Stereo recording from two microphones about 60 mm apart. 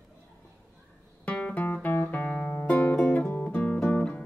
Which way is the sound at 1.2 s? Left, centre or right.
Left.